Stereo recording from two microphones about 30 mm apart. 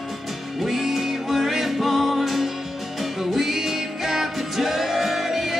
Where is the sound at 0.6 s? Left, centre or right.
Centre.